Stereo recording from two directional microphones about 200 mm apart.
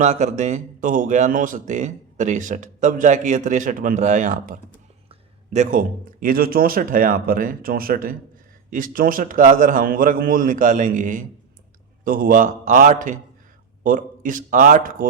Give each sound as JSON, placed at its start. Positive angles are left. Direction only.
{"t": 0.0, "sound": "speech", "side_deg": -35}